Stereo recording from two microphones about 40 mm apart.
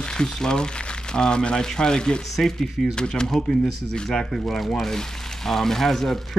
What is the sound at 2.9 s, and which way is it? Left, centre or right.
Speech, left.